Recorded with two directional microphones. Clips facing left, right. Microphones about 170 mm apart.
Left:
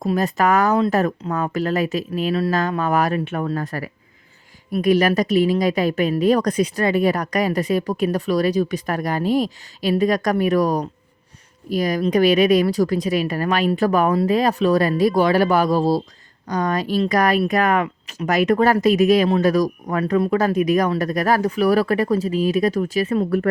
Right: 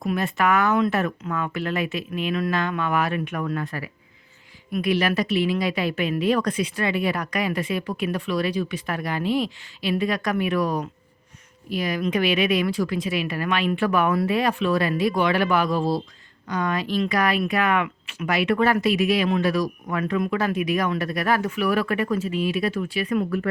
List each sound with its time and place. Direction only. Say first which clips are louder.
0.0 s speech: left 4 dB; 35° left (ahead or behind)